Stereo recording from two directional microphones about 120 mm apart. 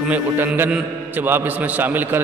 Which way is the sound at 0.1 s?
15° right (ahead or behind).